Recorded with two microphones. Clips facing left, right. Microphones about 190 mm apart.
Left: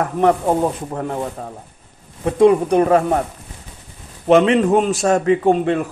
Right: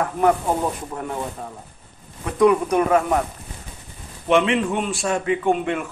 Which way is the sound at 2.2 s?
30° left (ahead or behind).